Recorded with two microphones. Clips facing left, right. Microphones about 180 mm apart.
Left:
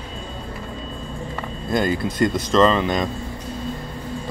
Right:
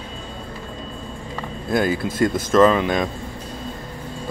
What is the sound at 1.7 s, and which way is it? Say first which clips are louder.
A man's voice: right 1 dB; 5° right (ahead or behind).